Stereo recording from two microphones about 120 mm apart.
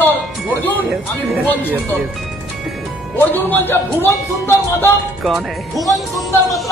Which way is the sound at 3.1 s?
20° left (ahead or behind).